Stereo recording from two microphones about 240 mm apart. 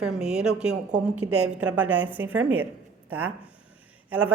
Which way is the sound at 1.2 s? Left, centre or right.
Right.